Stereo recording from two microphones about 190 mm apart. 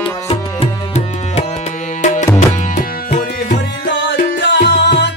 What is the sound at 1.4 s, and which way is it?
Tabla, 35° left (ahead or behind).